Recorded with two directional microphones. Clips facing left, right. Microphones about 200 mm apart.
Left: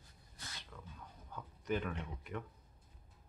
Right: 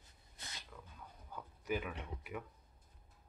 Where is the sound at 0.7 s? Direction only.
5° right (ahead or behind).